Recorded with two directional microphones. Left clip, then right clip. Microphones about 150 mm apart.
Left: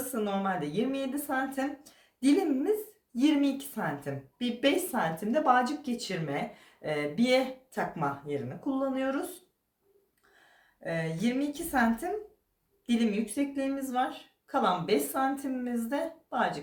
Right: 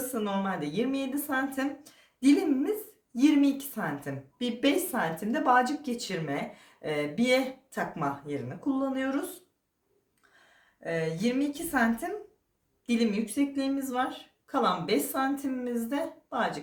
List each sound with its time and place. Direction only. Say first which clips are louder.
0.1 s a woman's voice: left 2 dB; 25° right (ahead or behind)
10.8 s a woman's voice: right 2 dB; 25° right (ahead or behind)